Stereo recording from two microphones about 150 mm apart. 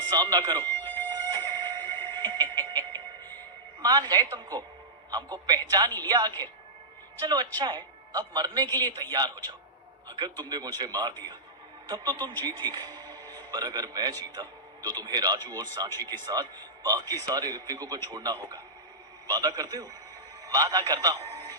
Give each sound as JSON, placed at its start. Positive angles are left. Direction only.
{"t": 0.1, "sound": "a man's voice", "side_deg": -25}
{"t": 0.6, "sound": "a sound", "side_deg": 15}
{"t": 1.3, "sound": "music", "side_deg": -25}
{"t": 3.8, "sound": "a man's voice", "side_deg": -25}